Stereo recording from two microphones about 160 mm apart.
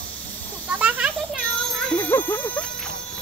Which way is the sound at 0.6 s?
10° right (ahead or behind).